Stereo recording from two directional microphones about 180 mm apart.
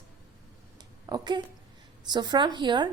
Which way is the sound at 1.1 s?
20° right (ahead or behind).